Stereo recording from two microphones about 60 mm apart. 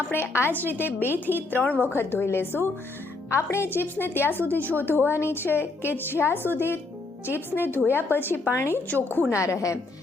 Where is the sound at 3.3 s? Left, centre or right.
Left.